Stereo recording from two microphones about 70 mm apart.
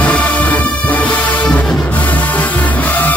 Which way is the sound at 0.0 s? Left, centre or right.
Left.